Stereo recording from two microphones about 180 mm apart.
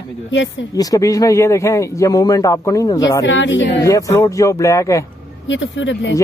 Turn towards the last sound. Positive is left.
turn(degrees=85)